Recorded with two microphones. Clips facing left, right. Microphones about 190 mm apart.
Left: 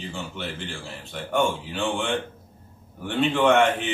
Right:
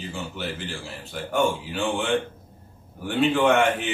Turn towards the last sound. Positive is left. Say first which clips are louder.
# even
turn(degrees=0)  # may be behind; listen again after turning